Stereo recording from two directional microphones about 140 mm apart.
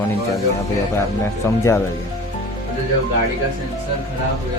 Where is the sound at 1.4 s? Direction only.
15° left (ahead or behind).